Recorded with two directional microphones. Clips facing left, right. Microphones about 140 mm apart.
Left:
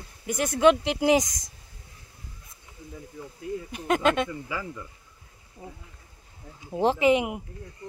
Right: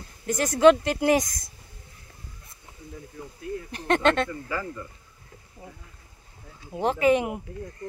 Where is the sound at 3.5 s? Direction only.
5° left (ahead or behind).